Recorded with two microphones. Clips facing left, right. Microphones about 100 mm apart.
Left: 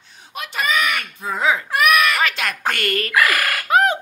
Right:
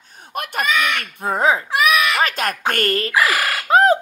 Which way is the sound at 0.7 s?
5° left (ahead or behind).